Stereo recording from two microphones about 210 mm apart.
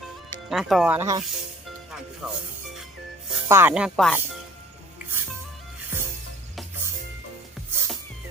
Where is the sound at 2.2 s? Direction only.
5° right (ahead or behind).